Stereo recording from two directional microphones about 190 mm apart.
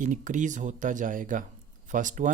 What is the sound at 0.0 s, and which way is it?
Speech, 40° right (ahead or behind).